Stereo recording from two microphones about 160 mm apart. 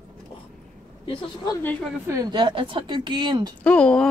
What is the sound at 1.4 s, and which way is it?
Speech, 20° left (ahead or behind).